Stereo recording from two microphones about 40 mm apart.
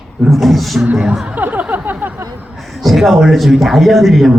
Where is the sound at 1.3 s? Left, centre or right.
Right.